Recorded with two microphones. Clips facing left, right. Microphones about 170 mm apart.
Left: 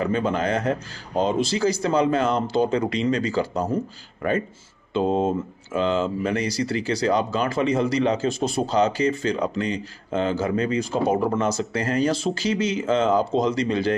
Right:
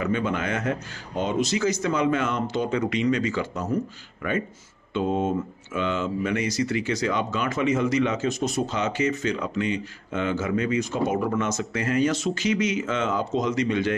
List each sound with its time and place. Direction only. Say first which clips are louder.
0.0 s speech: left 3 dB; 35° left (ahead or behind)